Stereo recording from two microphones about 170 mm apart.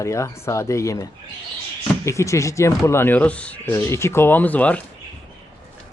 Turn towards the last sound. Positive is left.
turn(degrees=10)  # may be behind; listen again after turning